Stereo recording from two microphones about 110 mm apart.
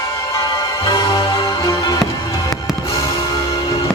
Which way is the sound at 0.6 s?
30° left (ahead or behind).